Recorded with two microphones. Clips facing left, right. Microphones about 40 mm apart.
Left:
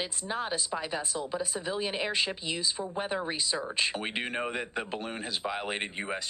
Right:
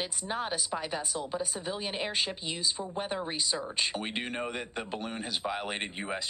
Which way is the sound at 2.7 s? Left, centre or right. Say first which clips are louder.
Left 2 dB; centre.